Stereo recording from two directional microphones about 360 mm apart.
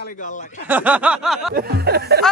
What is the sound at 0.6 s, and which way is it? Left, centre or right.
Speech, centre.